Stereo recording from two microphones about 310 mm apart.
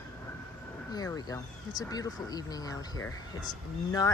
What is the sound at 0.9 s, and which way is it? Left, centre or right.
Speech, centre.